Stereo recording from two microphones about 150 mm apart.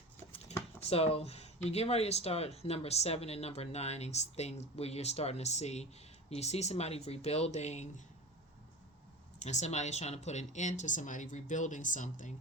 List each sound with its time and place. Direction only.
0.5 s a sound: 45° left (ahead or behind)
0.9 s speech: 40° left (ahead or behind)
9.4 s speech: 50° left (ahead or behind)